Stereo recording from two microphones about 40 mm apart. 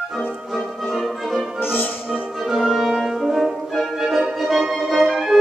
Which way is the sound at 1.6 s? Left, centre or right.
Left.